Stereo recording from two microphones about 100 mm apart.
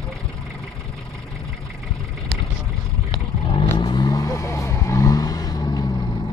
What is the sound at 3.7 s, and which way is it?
Vehicle, 45° left (ahead or behind).